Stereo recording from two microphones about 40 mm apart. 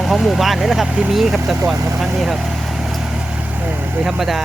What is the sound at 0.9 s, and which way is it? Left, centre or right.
Speech, right.